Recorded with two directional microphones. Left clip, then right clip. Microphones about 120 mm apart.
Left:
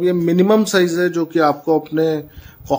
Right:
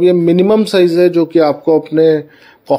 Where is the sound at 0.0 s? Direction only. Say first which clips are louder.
Right 6 dB; 30° right (ahead or behind).